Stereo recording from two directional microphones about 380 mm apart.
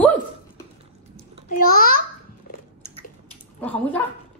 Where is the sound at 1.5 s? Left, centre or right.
Left.